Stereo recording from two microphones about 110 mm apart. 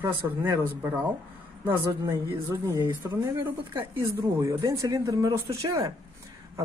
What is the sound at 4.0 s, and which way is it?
Speech, 25° right (ahead or behind).